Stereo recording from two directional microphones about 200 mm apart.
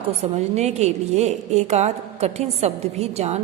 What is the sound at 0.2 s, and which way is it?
A woman's voice, 35° right (ahead or behind).